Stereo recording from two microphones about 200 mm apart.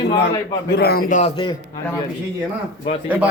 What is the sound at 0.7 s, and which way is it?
Speech, 50° left (ahead or behind).